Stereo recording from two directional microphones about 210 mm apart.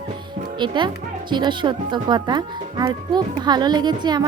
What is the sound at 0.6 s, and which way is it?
Speech, 20° right (ahead or behind).